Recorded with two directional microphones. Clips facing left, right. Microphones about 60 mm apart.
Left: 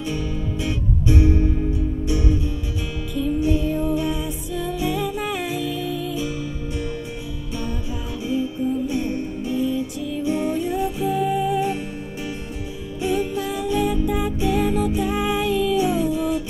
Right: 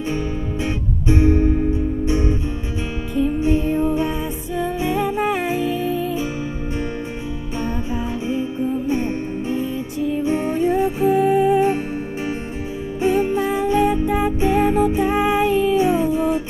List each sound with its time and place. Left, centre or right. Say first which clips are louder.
0.1 s music: right 2 dB; right
7.6 s music: right 7 dB; right
13.0 s music: right 5 dB; right